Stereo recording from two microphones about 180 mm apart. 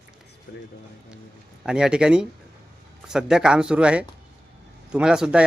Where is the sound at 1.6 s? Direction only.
5° right (ahead or behind).